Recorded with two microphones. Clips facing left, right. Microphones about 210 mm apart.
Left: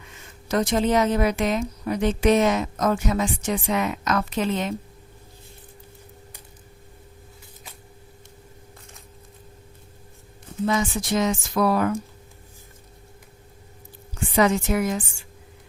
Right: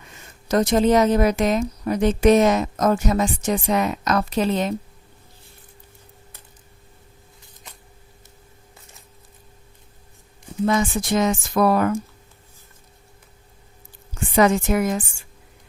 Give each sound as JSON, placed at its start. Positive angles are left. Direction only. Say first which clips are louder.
{"t": 0.4, "sound": "a woman's voice", "louder": "right 4 dB", "side_deg": -40}
{"t": 10.7, "sound": "speech", "louder": "right 3 dB", "side_deg": -50}
{"t": 14.3, "sound": "speech", "louder": "right 3 dB", "side_deg": -50}